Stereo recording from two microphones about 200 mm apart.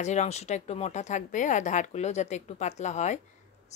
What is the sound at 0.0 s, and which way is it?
Speech, 35° left (ahead or behind).